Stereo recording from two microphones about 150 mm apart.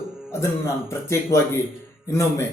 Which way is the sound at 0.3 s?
15° left (ahead or behind).